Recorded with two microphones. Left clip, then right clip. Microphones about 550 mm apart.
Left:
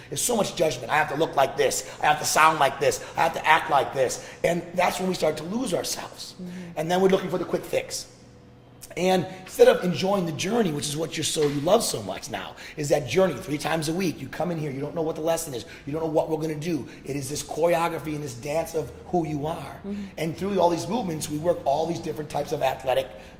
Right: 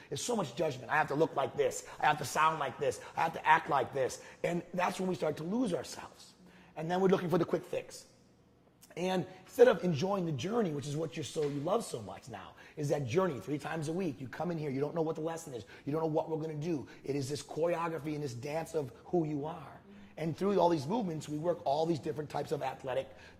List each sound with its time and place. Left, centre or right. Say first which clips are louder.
0.1 s a man's voice: left 10 dB; right
9.0 s a man's voice: left 12 dB; right
14.8 s speech: left 4 dB; right
15.2 s a man's voice: left 13 dB; right
15.9 s a man's voice: left 8 dB; right
16.4 s a man's voice: left 9 dB; right